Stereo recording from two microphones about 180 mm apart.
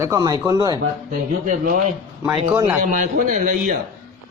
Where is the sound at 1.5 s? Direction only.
50° right (ahead or behind).